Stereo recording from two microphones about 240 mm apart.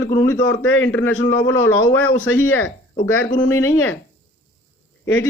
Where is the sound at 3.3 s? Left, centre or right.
Left.